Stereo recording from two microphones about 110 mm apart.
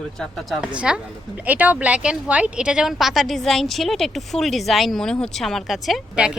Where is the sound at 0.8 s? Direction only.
10° right (ahead or behind).